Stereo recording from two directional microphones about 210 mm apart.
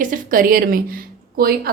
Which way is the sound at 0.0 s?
40° right (ahead or behind).